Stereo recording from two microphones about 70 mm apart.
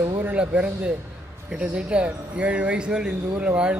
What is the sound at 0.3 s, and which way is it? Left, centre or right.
Speech, centre.